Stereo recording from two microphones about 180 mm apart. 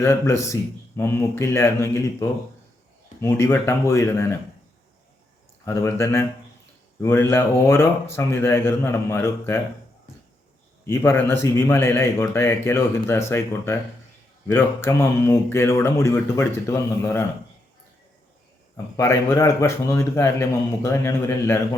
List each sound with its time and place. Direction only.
0.0 s speech: 15° left (ahead or behind)
5.6 s speech: 15° left (ahead or behind)
10.8 s speech: 15° left (ahead or behind)
18.9 s speech: 15° left (ahead or behind)